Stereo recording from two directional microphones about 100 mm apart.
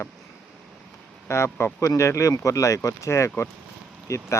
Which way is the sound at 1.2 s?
25° left (ahead or behind).